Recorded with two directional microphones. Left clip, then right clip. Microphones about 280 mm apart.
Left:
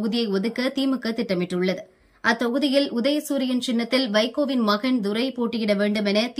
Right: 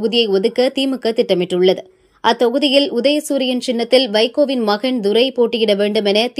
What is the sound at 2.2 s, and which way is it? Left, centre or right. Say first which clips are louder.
A woman's voice: right 8 dB; centre.